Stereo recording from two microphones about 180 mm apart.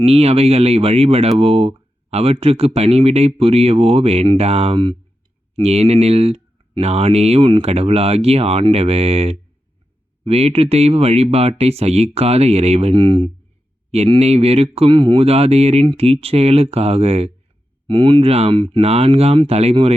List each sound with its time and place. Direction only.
0.0 s speech: 35° right (ahead or behind)